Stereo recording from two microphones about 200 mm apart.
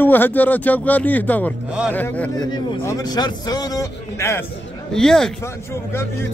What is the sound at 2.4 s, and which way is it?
Speech, 20° left (ahead or behind).